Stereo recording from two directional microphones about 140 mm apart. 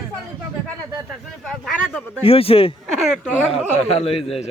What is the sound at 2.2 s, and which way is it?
Speech, 45° left (ahead or behind).